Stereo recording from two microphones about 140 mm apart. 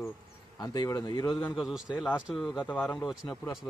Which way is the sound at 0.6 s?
30° left (ahead or behind).